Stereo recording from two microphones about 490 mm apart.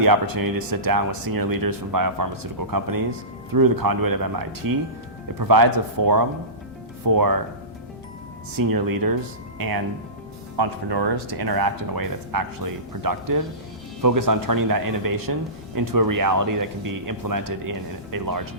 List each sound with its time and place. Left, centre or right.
0.0 s speech: right
8.5 s speech: right